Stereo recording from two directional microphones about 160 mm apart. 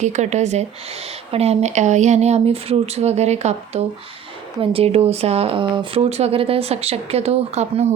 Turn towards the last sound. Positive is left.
turn(degrees=-40)  # may be behind; listen again after turning